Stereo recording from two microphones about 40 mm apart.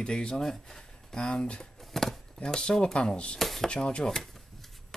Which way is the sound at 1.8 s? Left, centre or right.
Centre.